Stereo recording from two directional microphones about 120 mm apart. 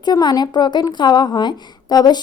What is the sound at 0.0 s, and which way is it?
Speech, 35° left (ahead or behind).